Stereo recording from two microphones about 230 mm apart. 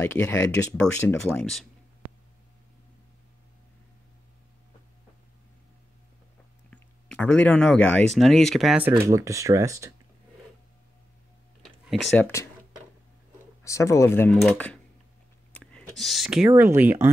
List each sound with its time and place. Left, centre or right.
0.0 s speech: centre
6.7 s speech: centre
11.6 s a sound: centre
13.7 s speech: centre
15.5 s a sound: centre
16.0 s speech: centre